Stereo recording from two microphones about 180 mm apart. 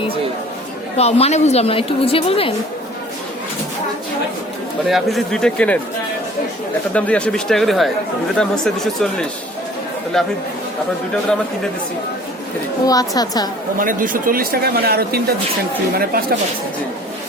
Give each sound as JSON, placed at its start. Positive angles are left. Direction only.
{"t": 0.9, "sound": "a woman's voice", "side_deg": 35}
{"t": 4.9, "sound": "a man's voice", "side_deg": 0}
{"t": 6.9, "sound": "a man's voice", "side_deg": 5}
{"t": 10.1, "sound": "a man's voice", "side_deg": 5}
{"t": 12.8, "sound": "a woman's voice", "side_deg": 20}
{"t": 13.7, "sound": "speech", "side_deg": -50}